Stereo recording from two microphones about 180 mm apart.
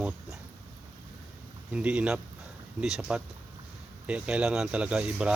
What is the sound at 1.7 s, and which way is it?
Speech, 5° right (ahead or behind).